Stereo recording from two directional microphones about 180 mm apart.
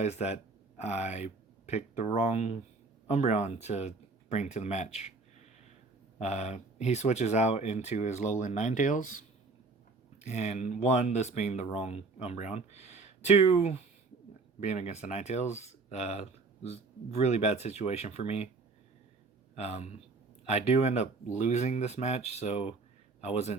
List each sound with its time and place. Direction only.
0.0 s speech: 35° left (ahead or behind)
6.1 s speech: 40° left (ahead or behind)
10.2 s speech: 40° left (ahead or behind)
19.5 s speech: 35° left (ahead or behind)